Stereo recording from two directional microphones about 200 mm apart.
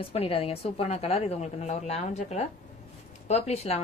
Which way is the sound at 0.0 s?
30° left (ahead or behind).